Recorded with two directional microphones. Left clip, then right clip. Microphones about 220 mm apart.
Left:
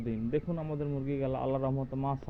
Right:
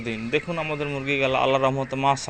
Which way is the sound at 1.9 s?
20° right (ahead or behind).